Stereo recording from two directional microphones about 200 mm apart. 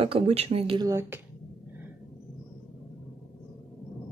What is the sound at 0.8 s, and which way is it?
Speech, 15° right (ahead or behind).